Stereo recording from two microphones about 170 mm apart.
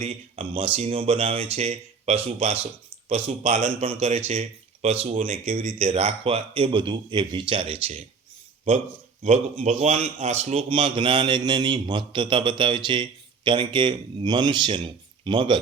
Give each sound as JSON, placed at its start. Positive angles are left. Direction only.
{"t": 0.0, "sound": "speech", "side_deg": -30}
{"t": 9.2, "sound": "speech", "side_deg": -40}